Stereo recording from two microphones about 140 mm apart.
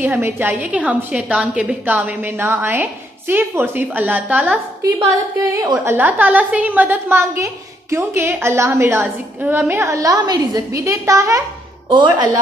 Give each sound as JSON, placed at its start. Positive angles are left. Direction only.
{"t": 0.0, "sound": "a woman's voice", "side_deg": -15}
{"t": 4.9, "sound": "a woman's voice", "side_deg": -25}